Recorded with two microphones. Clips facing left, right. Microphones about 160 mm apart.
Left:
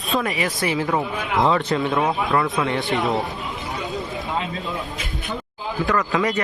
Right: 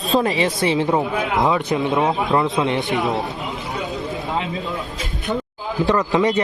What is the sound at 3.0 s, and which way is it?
Speech, centre (ahead or behind).